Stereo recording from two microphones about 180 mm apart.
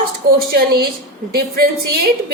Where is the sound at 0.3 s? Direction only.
60° right (ahead or behind).